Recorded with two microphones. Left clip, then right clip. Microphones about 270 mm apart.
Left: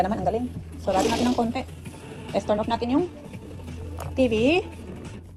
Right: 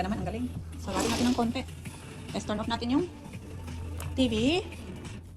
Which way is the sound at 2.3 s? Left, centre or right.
Centre.